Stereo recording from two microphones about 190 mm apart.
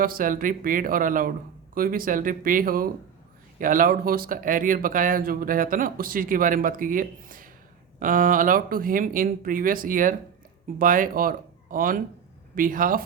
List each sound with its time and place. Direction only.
0.0 s speech: 50° right (ahead or behind)